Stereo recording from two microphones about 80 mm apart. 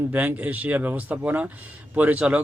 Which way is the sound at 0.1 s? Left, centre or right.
Right.